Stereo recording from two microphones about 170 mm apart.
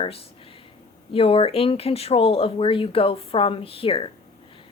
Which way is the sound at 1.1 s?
35° left (ahead or behind).